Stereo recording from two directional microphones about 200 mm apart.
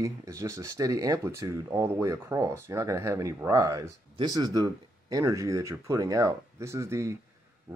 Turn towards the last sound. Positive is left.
turn(degrees=-15)  # may be behind; listen again after turning